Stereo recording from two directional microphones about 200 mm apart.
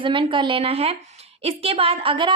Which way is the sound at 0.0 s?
25° right (ahead or behind).